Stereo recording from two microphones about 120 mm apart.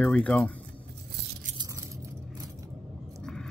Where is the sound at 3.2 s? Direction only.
5° left (ahead or behind).